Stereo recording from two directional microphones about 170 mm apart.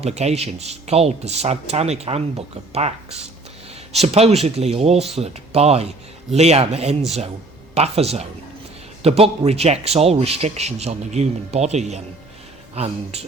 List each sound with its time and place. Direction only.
0.0 s a man's voice: 40° right (ahead or behind)